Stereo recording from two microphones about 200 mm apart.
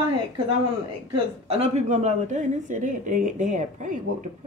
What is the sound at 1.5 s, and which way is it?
Speech, 30° right (ahead or behind).